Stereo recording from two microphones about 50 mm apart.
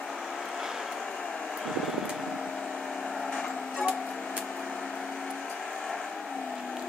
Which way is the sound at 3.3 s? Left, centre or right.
Centre.